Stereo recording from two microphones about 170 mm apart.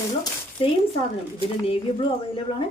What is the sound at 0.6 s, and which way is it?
A woman's voice, 35° left (ahead or behind).